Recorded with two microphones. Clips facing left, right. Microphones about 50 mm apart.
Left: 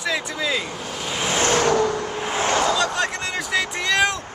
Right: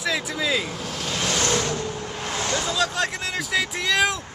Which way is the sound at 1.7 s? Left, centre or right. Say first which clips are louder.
Left 9 dB; left.